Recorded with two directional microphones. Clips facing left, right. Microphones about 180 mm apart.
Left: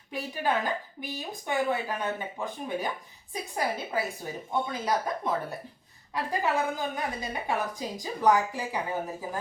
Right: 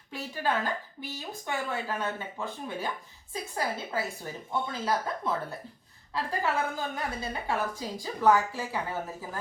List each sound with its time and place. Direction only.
0.1 s a woman's voice: 15° left (ahead or behind)